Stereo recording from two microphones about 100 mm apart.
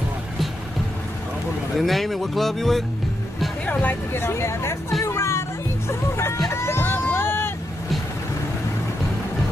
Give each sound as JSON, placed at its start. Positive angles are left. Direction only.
{"t": 1.8, "sound": "speech", "side_deg": 0}
{"t": 3.6, "sound": "speech", "side_deg": 20}
{"t": 5.0, "sound": "music", "side_deg": 30}
{"t": 6.5, "sound": "vehicle", "side_deg": 25}